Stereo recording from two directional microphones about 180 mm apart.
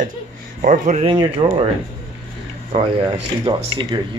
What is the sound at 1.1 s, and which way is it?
Speech, 30° right (ahead or behind).